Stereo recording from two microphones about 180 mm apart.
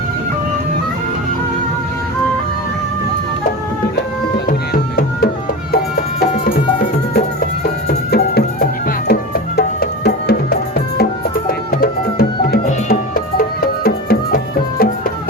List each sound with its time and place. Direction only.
4.4 s music: 55° left (ahead or behind)
7.6 s music: 60° left (ahead or behind)